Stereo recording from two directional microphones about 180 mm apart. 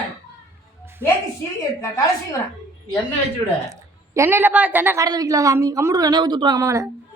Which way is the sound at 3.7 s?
15° right (ahead or behind).